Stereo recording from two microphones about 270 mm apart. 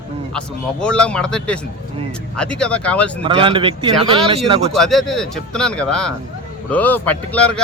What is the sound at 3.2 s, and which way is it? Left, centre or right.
Speech, centre.